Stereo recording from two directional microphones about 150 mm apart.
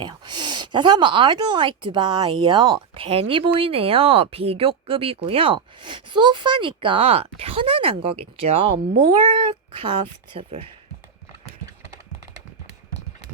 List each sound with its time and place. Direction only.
0.0 s speech: 30° right (ahead or behind)